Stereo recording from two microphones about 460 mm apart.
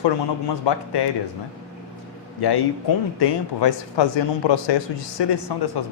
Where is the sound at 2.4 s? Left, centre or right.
Left.